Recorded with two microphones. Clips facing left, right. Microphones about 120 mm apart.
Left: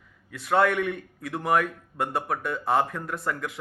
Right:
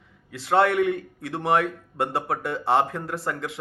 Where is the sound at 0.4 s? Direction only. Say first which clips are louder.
Right 3 dB; 25° right (ahead or behind).